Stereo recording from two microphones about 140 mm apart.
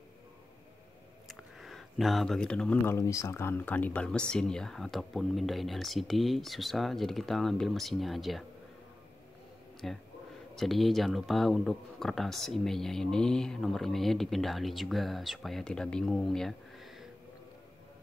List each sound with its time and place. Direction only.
1.2 s a sound: centre (ahead or behind)
2.8 s speech: 20° left (ahead or behind); by 8.5 s centre (ahead or behind)
9.8 s speech: centre (ahead or behind)